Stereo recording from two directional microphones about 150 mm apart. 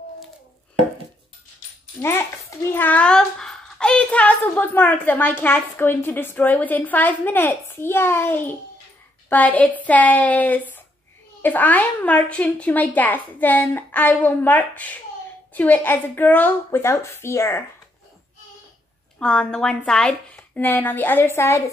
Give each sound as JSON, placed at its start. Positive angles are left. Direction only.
{"t": 2.0, "sound": "a child's voice", "side_deg": 15}
{"t": 19.1, "sound": "a child's voice", "side_deg": 5}